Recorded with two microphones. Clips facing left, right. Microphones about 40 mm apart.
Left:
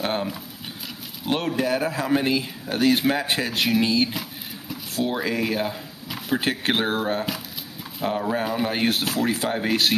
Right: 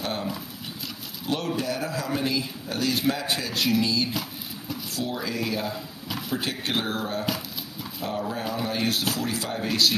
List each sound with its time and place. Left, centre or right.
0.0 s speech: left
6.0 s a sound: centre
6.3 s speech: left